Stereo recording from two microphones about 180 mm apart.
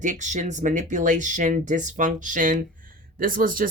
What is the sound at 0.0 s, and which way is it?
Speech, 40° right (ahead or behind).